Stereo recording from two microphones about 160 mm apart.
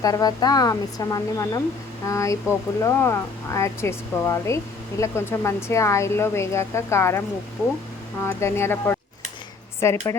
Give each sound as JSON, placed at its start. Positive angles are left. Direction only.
{"t": 0.0, "sound": "a woman's voice", "side_deg": 25}
{"t": 8.2, "sound": "speech", "side_deg": 15}